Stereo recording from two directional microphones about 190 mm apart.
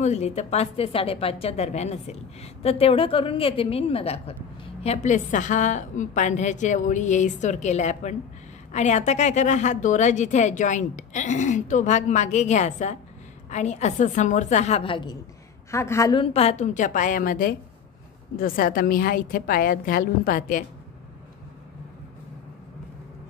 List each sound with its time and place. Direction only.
0.0 s a woman's voice: 35° left (ahead or behind)
15.7 s a woman's voice: 15° left (ahead or behind)
16.2 s a woman's voice: 30° left (ahead or behind)